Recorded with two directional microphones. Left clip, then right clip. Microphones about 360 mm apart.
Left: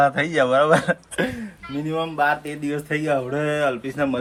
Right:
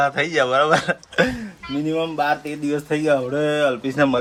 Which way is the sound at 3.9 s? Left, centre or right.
Right.